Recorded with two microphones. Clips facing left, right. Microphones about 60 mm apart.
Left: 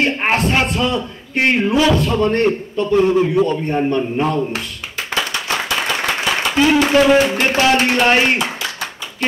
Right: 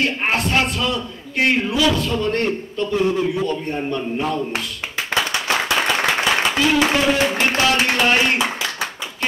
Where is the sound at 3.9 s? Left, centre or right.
Left.